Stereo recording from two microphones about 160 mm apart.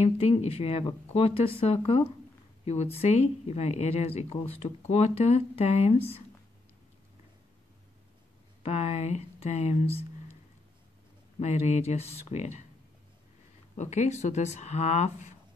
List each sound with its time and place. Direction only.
0.0 s speech: 40° left (ahead or behind)
8.6 s speech: 40° left (ahead or behind)
11.3 s speech: 40° left (ahead or behind)
13.7 s speech: 45° left (ahead or behind)